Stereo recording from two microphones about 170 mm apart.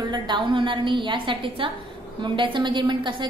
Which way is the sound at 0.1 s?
25° right (ahead or behind).